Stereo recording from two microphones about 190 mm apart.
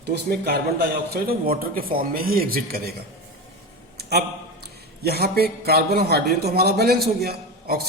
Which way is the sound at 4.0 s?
55° right (ahead or behind).